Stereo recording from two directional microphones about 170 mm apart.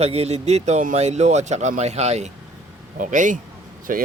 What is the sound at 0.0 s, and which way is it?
Speech, 35° right (ahead or behind).